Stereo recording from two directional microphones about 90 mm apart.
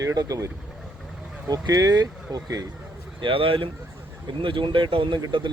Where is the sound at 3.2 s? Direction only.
75° right (ahead or behind).